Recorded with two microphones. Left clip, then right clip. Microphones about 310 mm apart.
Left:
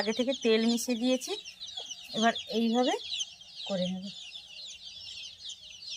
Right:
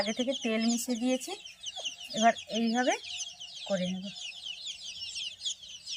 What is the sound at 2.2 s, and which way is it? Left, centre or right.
Speech, centre.